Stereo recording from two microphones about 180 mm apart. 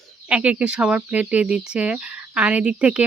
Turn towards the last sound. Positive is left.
turn(degrees=-5)  # may be behind; listen again after turning